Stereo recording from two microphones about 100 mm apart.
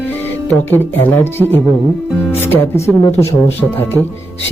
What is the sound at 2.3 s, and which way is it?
Speech, 20° left (ahead or behind).